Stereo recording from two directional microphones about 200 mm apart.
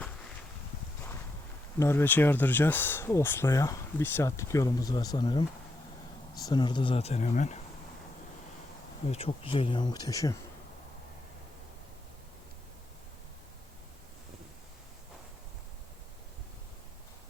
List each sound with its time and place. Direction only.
1.8 s speech: 10° left (ahead or behind); by 7.6 s 35° left (ahead or behind)
9.0 s speech: 30° left (ahead or behind)